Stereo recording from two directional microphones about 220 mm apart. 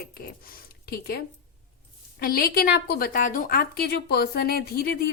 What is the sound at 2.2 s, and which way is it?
A woman's voice, 40° left (ahead or behind).